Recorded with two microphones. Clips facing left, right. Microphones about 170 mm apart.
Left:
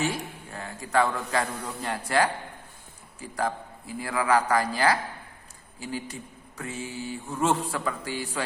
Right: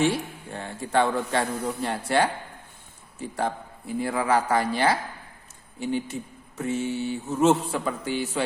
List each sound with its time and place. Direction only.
0.1 s a man's voice: 30° right (ahead or behind)